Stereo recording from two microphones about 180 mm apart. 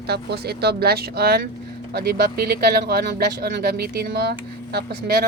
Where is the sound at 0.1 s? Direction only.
65° right (ahead or behind).